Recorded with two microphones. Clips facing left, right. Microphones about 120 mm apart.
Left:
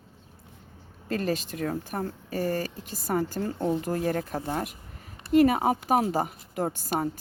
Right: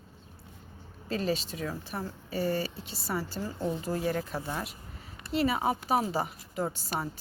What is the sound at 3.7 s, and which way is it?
Speech, 50° left (ahead or behind).